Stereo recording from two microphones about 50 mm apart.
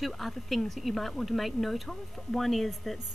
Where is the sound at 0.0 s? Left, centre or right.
Centre.